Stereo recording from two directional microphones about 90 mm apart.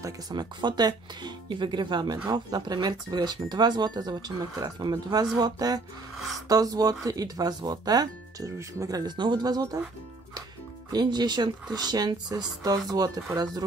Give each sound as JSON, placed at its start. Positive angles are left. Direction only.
{"t": 0.3, "sound": "speech", "side_deg": -55}
{"t": 8.5, "sound": "speech", "side_deg": -35}
{"t": 10.9, "sound": "speech", "side_deg": -50}